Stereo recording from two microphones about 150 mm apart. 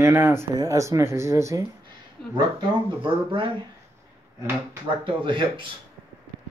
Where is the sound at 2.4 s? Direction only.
30° right (ahead or behind).